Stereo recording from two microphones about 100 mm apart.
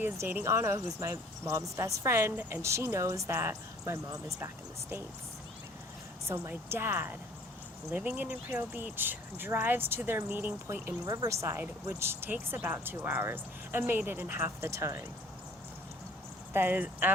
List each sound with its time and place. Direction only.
0.0 s speech: 20° right (ahead or behind)
6.2 s a woman's voice: 30° right (ahead or behind)
11.0 s speech: 35° right (ahead or behind)
16.5 s speech: 20° right (ahead or behind)